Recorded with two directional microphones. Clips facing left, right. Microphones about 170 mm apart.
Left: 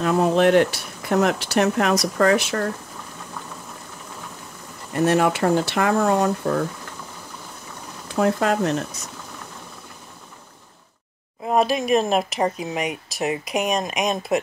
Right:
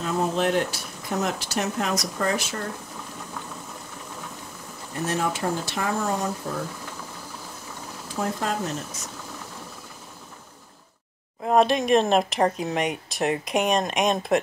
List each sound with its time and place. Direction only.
0.0 s speech: 70° left (ahead or behind)
4.9 s speech: 70° left (ahead or behind)
8.2 s speech: 70° left (ahead or behind)
11.4 s speech: 5° left (ahead or behind)